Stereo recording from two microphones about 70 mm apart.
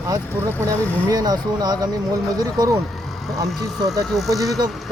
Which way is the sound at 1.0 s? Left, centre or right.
Right.